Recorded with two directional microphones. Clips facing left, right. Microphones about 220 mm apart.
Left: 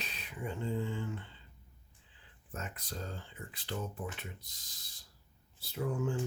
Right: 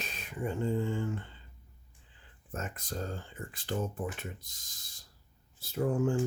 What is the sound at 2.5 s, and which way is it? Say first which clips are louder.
Speech: right 5 dB; 45° right (ahead or behind).